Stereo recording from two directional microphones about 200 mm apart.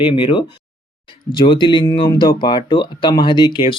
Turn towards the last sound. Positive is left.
turn(degrees=20)  # may be behind; listen again after turning